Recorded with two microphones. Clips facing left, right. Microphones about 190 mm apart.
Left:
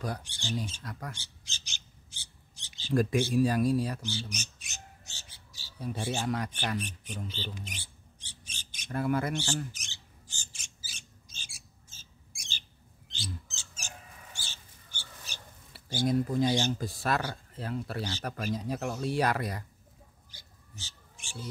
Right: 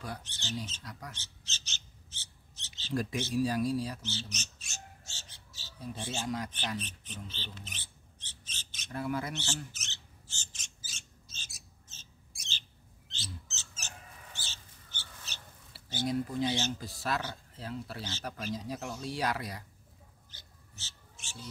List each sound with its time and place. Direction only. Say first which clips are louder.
0.2 s speech: left 4 dB; 10° left (ahead or behind)
1.1 s filing: left 1 dB; 10° left (ahead or behind)
2.9 s speech: left 6 dB; 55° left (ahead or behind)
4.0 s speech: left 4 dB; 10° left (ahead or behind)
6.1 s speech: left 2 dB; 65° left (ahead or behind)
6.8 s speech: left 5 dB; 10° left (ahead or behind)
7.2 s mouse: left 6 dB; 15° left (ahead or behind)
8.9 s speech: left 5 dB; 55° left (ahead or behind)
9.3 s mouse: left 6 dB; 15° left (ahead or behind)
15.7 s a sound: left 2 dB; 55° left (ahead or behind)
16.1 s speech: left 4 dB; 45° left (ahead or behind)
20.2 s owl: left 1 dB; 10° left (ahead or behind)